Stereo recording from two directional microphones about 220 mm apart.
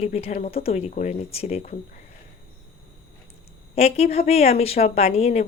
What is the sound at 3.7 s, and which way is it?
Speech, 30° left (ahead or behind).